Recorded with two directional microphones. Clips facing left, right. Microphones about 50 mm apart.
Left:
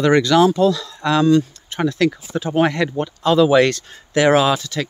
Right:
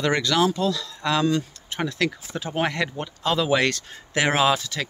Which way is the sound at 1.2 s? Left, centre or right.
Centre.